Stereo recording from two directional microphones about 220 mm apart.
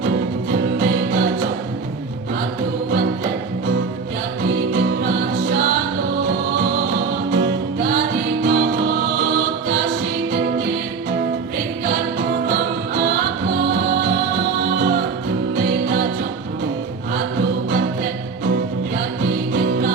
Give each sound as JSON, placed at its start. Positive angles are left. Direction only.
{"t": 0.5, "sound": "music", "side_deg": -45}
{"t": 4.7, "sound": "music", "side_deg": -45}
{"t": 12.5, "sound": "music", "side_deg": -45}
{"t": 19.5, "sound": "music", "side_deg": -45}